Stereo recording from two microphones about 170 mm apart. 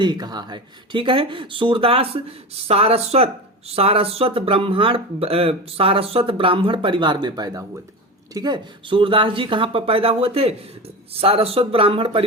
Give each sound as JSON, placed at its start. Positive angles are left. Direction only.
{"t": 0.0, "sound": "speech", "side_deg": -25}